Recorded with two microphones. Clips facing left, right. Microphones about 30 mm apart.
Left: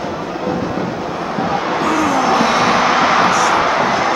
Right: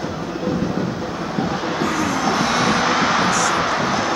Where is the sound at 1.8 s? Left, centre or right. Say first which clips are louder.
Left 5 dB; centre.